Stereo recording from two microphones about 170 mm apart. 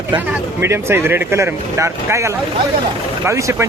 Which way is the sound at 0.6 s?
15° right (ahead or behind).